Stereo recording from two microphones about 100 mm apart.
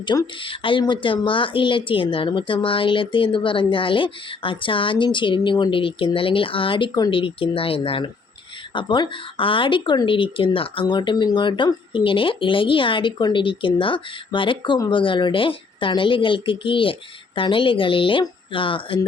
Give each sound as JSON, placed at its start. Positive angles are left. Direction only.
{"t": 0.1, "sound": "speech", "side_deg": 40}
{"t": 0.4, "sound": "speech", "side_deg": 60}
{"t": 7.1, "sound": "speech", "side_deg": 60}
{"t": 8.7, "sound": "speech", "side_deg": 55}